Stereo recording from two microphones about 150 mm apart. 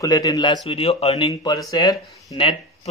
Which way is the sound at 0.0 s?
25° left (ahead or behind).